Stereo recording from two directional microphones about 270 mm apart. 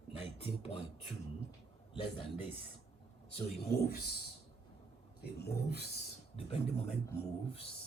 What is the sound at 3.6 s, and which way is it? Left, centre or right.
Speech, left.